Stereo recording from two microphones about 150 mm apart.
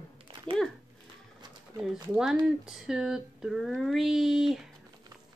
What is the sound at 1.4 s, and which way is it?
Pigeon, 25° right (ahead or behind).